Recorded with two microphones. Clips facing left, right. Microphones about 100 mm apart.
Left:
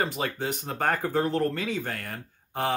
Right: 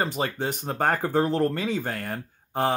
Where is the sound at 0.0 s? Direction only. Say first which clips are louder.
Right 2 dB; 30° right (ahead or behind).